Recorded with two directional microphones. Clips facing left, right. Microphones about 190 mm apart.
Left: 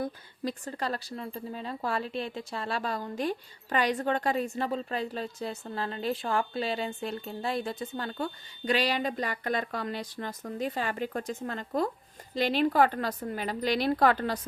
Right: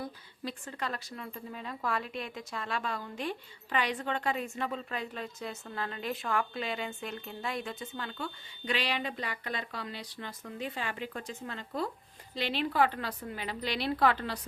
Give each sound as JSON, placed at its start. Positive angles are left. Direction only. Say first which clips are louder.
{"t": 0.0, "sound": "a woman's voice", "louder": "left 6 dB", "side_deg": 40}